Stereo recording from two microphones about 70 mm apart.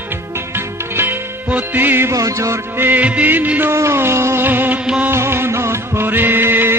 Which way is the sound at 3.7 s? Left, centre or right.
Right.